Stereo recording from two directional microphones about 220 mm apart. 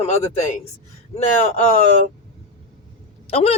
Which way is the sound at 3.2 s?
25° left (ahead or behind).